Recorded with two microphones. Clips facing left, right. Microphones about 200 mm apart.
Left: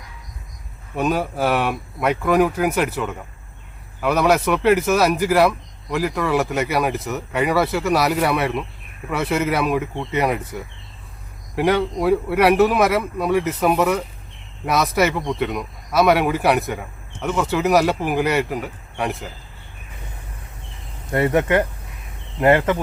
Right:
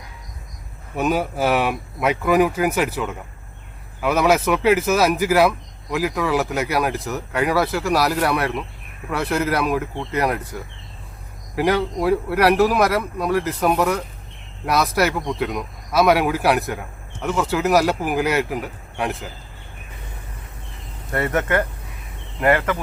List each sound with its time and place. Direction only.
0.9 s speech: 5° right (ahead or behind)
21.1 s speech: 20° left (ahead or behind)